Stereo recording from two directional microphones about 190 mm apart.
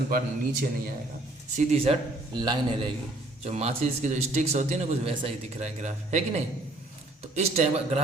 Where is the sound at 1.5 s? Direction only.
30° right (ahead or behind).